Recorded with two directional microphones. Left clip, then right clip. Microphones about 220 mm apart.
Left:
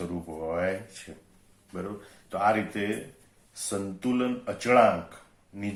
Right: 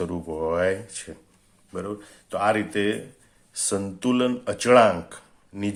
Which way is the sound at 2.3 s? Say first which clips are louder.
Right 2 dB; 40° right (ahead or behind).